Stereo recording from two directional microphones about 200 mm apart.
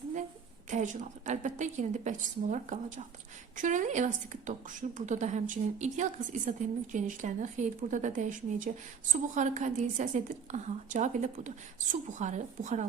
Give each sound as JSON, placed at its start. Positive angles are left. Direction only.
{"t": 0.7, "sound": "a woman's voice", "side_deg": -40}